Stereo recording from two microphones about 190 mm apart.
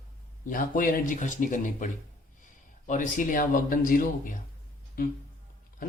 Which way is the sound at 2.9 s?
45° left (ahead or behind).